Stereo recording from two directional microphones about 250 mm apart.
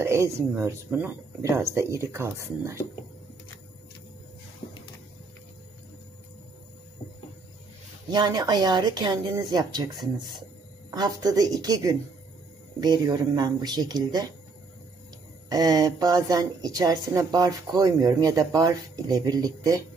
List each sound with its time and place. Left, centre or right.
0.0 s a woman's voice: centre
8.1 s a woman's voice: centre
10.9 s a woman's voice: centre
15.5 s a woman's voice: centre